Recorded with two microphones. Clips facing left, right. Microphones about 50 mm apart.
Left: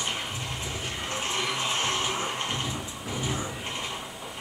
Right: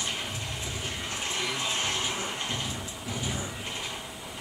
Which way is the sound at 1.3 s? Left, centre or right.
Left.